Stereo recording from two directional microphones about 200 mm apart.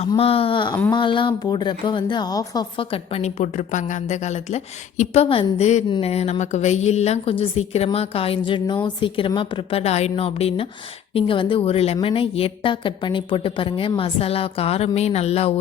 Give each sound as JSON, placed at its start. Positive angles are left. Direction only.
{"t": 0.1, "sound": "speech", "side_deg": 30}